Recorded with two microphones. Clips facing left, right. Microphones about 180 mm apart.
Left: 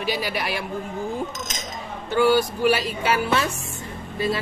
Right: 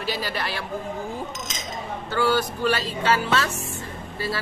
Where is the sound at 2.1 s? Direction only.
15° left (ahead or behind).